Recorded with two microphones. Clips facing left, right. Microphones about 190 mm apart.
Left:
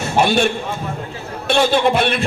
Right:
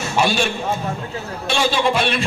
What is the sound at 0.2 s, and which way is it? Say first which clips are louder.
Speech: left 3 dB; 60° left (ahead or behind).